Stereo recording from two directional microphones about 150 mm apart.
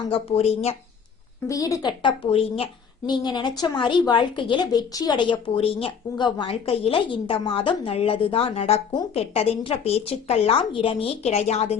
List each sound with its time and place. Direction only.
0.1 s a woman's voice: 45° left (ahead or behind)
1.5 s speech: 20° left (ahead or behind); by 2.6 s 40° left (ahead or behind)
3.1 s a woman's voice: 30° left (ahead or behind); by 11.8 s 45° left (ahead or behind)